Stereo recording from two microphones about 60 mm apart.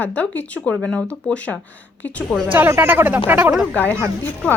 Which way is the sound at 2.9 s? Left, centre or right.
Right.